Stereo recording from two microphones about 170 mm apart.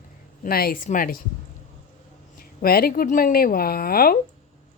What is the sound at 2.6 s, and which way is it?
A woman's voice, 60° left (ahead or behind).